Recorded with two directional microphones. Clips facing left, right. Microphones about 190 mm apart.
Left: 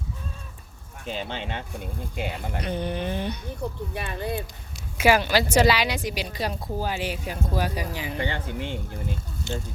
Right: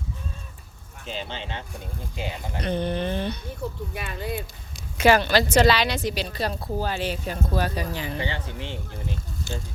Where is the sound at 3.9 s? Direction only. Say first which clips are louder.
Left 2 dB; 25° left (ahead or behind).